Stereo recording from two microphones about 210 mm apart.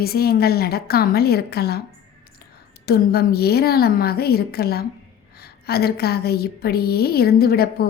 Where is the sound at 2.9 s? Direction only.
50° left (ahead or behind).